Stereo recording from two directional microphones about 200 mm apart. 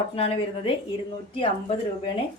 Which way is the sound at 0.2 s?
30° left (ahead or behind).